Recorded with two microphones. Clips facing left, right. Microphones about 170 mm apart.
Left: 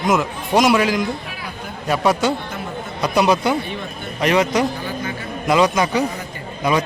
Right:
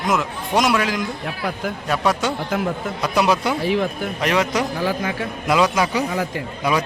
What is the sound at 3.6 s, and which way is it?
Speech, 90° right.